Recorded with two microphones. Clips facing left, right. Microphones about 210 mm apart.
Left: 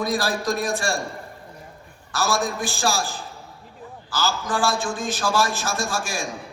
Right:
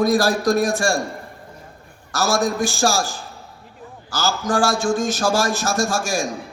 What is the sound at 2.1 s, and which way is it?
A man's voice, 45° right (ahead or behind).